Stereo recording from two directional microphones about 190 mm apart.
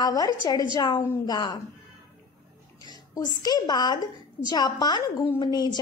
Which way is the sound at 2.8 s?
20° left (ahead or behind).